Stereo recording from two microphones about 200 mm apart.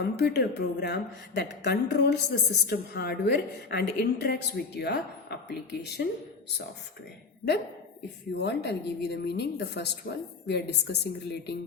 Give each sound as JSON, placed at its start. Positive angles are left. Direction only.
{"t": 0.0, "sound": "a woman's voice", "side_deg": 55}
{"t": 8.4, "sound": "a woman's voice", "side_deg": 55}